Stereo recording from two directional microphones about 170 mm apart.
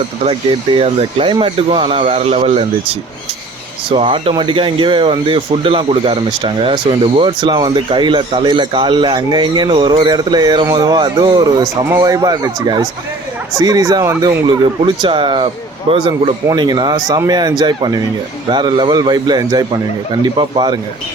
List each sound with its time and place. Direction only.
0.3 s speech: 35° right (ahead or behind)